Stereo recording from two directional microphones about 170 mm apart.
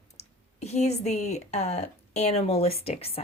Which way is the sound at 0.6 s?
40° left (ahead or behind).